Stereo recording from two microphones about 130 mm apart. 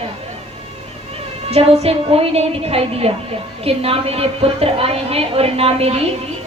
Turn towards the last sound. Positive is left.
turn(degrees=-50)  # may be behind; listen again after turning